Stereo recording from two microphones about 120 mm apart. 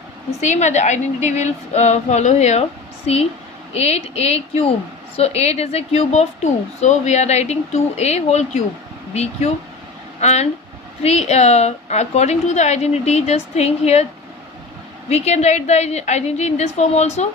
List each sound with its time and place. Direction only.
0.4 s a woman's voice: 75° left (ahead or behind)
3.8 s a woman's voice: 60° left (ahead or behind)
15.1 s a woman's voice: 65° left (ahead or behind)